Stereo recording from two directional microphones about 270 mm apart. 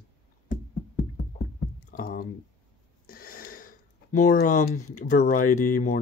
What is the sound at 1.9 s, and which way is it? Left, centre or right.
Speech, left.